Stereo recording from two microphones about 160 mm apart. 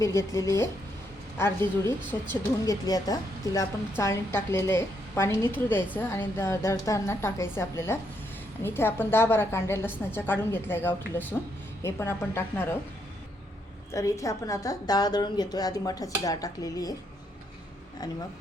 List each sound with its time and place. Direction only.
0.0 s a woman's voice: 20° left (ahead or behind)
2.8 s a woman's voice: 25° left (ahead or behind)
13.9 s a woman's voice: 20° left (ahead or behind)